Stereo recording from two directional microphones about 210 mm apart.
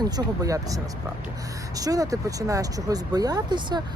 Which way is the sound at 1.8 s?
15° right (ahead or behind).